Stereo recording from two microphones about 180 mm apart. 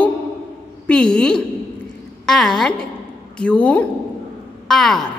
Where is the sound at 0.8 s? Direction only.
5° left (ahead or behind).